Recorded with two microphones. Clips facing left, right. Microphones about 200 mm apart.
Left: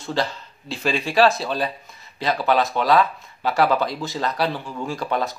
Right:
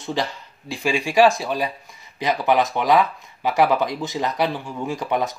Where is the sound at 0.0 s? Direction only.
15° right (ahead or behind).